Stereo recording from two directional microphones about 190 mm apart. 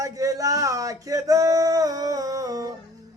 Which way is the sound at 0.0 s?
20° right (ahead or behind).